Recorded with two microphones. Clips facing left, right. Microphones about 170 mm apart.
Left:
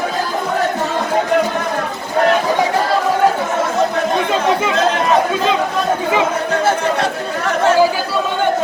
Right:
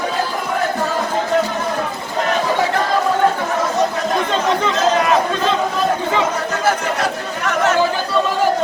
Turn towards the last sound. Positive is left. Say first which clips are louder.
# left 3 dB
turn(degrees=30)  # may be behind; listen again after turning